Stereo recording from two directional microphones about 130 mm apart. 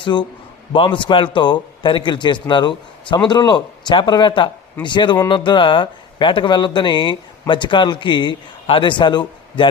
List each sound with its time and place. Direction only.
0.0 s speech: 35° left (ahead or behind)